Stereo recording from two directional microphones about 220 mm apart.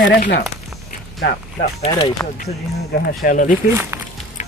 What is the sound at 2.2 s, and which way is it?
Speech, 10° left (ahead or behind).